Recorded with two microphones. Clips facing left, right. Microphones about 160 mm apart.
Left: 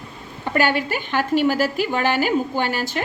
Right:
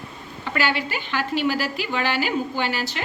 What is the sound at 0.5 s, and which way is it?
A woman's voice, 50° left (ahead or behind).